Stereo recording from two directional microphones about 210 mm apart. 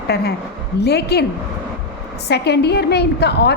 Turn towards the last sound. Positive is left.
turn(degrees=50)  # may be behind; listen again after turning